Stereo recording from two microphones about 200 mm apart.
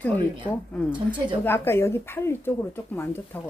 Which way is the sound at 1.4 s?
10° left (ahead or behind).